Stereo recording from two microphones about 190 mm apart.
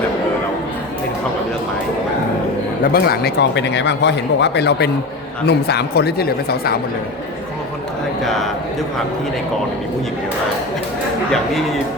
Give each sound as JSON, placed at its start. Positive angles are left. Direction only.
{"t": 2.8, "sound": "speech", "side_deg": 50}
{"t": 8.2, "sound": "speech", "side_deg": 0}
{"t": 11.3, "sound": "speech", "side_deg": 0}